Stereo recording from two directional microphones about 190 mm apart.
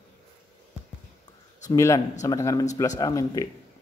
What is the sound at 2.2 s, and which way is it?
Mantra, 15° left (ahead or behind).